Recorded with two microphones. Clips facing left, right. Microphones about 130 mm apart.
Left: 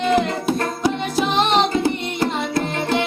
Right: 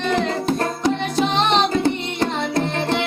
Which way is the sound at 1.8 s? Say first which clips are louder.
Even; 5° left (ahead or behind).